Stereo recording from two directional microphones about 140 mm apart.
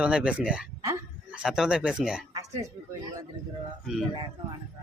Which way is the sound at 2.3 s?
25° right (ahead or behind).